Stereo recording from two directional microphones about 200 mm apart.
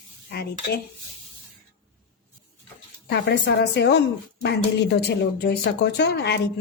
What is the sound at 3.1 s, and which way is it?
Speech, 55° left (ahead or behind).